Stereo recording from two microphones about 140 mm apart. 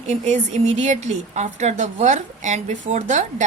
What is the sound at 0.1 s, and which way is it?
A woman's voice, 55° right (ahead or behind).